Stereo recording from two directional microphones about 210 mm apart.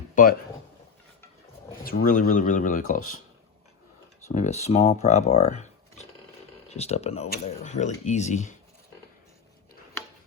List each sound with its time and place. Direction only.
0.1 s a sound: 40° left (ahead or behind)
1.8 s speech: 45° left (ahead or behind)
4.3 s speech: 35° left (ahead or behind)